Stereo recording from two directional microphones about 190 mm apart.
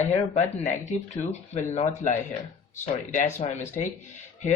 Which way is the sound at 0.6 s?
40° left (ahead or behind).